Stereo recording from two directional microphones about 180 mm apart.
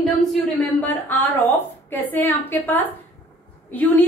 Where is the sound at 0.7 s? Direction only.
10° left (ahead or behind).